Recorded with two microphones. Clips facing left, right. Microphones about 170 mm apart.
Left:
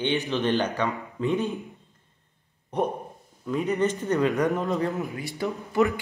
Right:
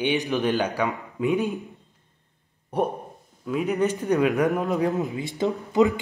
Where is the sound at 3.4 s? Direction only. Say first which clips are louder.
Right 1 dB; 5° right (ahead or behind).